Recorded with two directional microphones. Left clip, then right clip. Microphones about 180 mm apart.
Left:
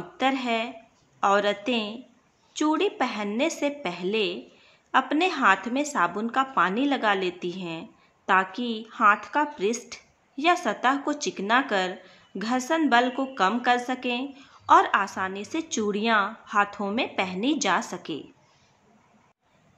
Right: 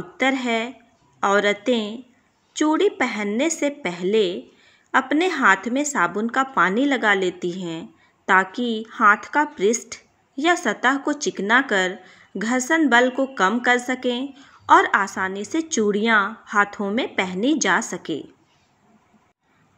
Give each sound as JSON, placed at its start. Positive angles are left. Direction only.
{"t": 0.2, "sound": "a woman's voice", "side_deg": -15}